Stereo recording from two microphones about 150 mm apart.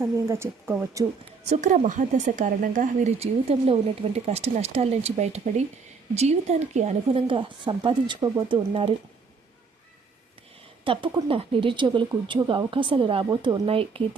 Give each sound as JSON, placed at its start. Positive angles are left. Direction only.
{"t": 0.0, "sound": "a woman's voice", "side_deg": -15}
{"t": 1.5, "sound": "speech", "side_deg": -50}
{"t": 3.2, "sound": "a woman's voice", "side_deg": -40}
{"t": 10.9, "sound": "a woman's voice", "side_deg": -35}